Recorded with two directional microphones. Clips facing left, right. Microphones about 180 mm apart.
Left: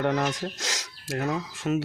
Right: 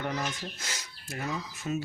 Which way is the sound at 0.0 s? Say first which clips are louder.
Left 8 dB; 70° left (ahead or behind).